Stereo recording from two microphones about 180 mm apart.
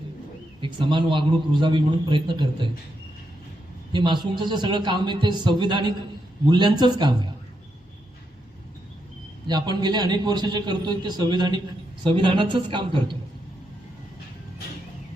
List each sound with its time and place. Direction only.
0.6 s a man's voice: 25° right (ahead or behind)
3.9 s a man's voice: 25° right (ahead or behind)
9.5 s a man's voice: 20° right (ahead or behind)